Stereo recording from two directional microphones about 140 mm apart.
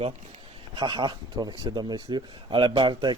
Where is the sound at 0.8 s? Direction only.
35° right (ahead or behind).